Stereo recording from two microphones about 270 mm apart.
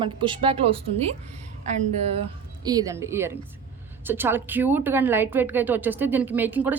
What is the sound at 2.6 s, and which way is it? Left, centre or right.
Speech, centre.